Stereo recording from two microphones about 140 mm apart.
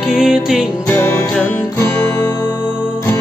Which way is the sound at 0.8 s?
15° left (ahead or behind).